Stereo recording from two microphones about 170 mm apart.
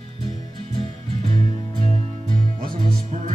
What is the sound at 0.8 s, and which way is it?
Music, 30° right (ahead or behind).